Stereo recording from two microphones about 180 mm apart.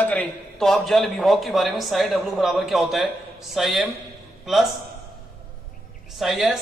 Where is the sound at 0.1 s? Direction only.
5° left (ahead or behind).